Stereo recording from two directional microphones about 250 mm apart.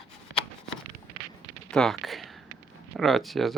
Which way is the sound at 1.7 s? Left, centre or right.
Centre.